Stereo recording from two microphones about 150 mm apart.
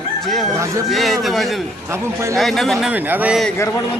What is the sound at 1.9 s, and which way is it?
Speech, 20° right (ahead or behind).